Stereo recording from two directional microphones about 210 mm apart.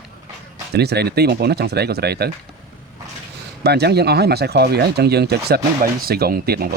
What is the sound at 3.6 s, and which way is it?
Speech, 50° right (ahead or behind).